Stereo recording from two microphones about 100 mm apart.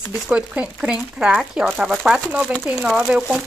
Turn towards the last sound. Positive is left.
turn(degrees=-10)  # may be behind; listen again after turning